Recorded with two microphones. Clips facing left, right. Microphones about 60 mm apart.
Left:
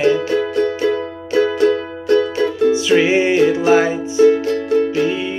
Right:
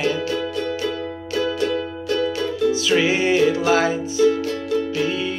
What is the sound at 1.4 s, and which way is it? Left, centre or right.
Music, left.